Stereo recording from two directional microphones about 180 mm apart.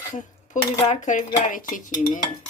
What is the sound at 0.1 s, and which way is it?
Cutlery, 45° left (ahead or behind).